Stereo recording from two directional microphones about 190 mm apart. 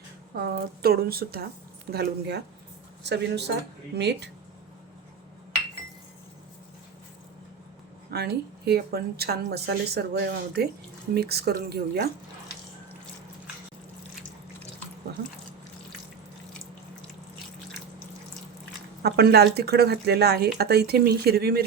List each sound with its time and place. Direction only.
0.3 s speech: 55° right (ahead or behind)
8.1 s speech: 60° right (ahead or behind)
19.0 s speech: 55° right (ahead or behind)